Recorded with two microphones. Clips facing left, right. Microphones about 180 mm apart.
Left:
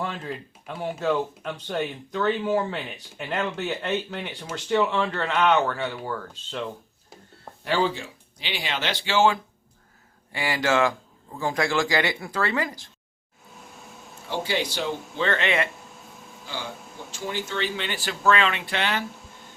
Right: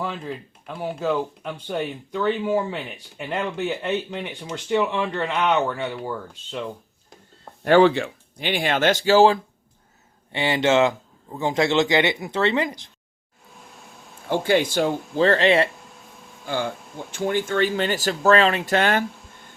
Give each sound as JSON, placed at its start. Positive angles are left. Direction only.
{"t": 0.0, "sound": "speech", "side_deg": 0}
{"t": 7.6, "sound": "speech", "side_deg": -65}
{"t": 10.3, "sound": "a man's voice", "side_deg": -25}
{"t": 14.3, "sound": "speech", "side_deg": -50}
{"t": 16.5, "sound": "speech", "side_deg": -55}